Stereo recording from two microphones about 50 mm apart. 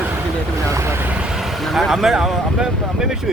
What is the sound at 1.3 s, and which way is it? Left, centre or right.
Speech, centre.